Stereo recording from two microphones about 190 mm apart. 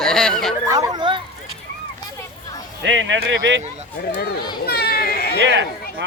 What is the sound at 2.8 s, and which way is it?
Speech, 70° right (ahead or behind).